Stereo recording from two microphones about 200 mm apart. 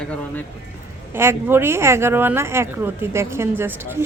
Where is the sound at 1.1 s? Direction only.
10° right (ahead or behind).